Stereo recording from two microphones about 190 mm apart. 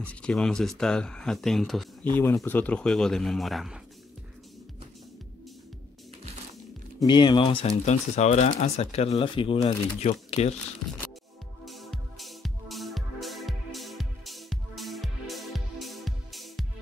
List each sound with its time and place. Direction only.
0.0 s speech: 5° left (ahead or behind)
7.0 s speech: 25° left (ahead or behind)
11.6 s music: centre (ahead or behind)